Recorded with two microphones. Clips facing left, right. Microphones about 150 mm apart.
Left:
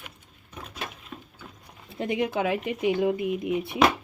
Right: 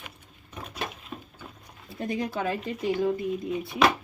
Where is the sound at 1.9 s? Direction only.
20° left (ahead or behind).